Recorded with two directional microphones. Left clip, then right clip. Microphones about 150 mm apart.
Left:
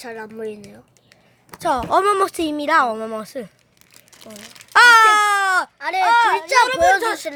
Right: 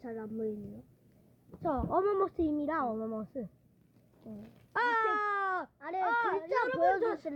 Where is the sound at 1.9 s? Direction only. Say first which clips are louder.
Left 13 dB; 30° left (ahead or behind).